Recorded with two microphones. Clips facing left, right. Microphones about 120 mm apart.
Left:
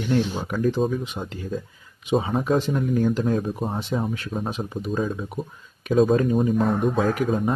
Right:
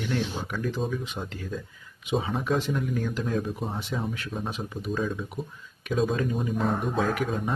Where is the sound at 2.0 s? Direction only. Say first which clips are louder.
Left 5 dB; 40° left (ahead or behind).